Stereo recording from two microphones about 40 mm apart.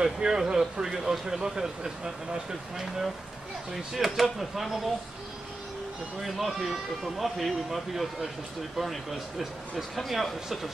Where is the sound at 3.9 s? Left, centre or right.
Centre.